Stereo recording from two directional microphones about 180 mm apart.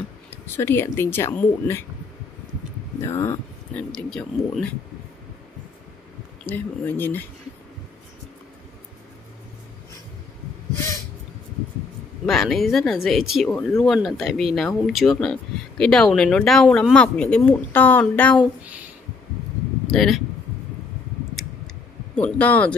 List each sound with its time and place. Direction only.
0.6 s speech: 15° left (ahead or behind)
3.0 s speech: 15° left (ahead or behind)
3.9 s speech: 5° left (ahead or behind)
6.4 s speech: 10° left (ahead or behind)
12.3 s speech: centre (ahead or behind)
19.9 s speech: centre (ahead or behind)
22.1 s speech: 10° left (ahead or behind)